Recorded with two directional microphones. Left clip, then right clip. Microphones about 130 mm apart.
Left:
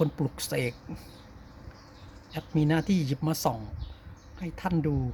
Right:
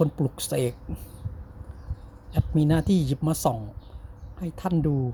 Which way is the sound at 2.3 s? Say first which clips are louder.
Right 3 dB; 30° right (ahead or behind).